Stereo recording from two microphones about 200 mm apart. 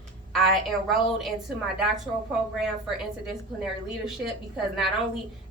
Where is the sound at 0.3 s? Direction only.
Centre (ahead or behind).